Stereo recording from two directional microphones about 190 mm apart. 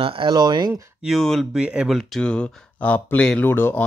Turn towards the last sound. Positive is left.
turn(degrees=10)  # may be behind; listen again after turning